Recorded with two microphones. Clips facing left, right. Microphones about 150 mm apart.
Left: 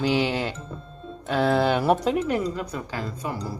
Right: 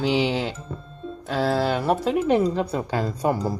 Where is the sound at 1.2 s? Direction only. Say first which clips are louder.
Left 1 dB; centre (ahead or behind).